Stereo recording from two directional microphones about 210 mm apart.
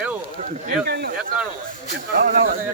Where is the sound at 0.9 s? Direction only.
50° right (ahead or behind).